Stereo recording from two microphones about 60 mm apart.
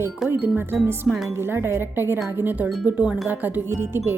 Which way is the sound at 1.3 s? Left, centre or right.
Right.